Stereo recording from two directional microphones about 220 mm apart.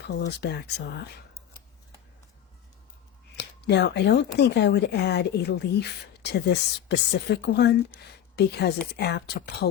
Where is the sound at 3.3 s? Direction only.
50° left (ahead or behind).